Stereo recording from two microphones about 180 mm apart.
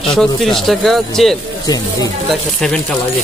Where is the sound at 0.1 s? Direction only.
Centre (ahead or behind).